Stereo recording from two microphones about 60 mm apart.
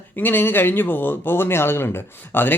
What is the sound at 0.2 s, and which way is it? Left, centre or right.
Speech, left.